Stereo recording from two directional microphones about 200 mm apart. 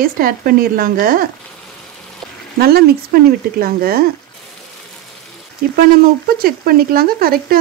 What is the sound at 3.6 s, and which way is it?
Speech, 50° right (ahead or behind).